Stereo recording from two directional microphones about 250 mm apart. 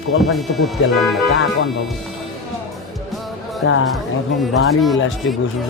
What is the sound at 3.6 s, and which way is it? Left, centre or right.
Speech, left.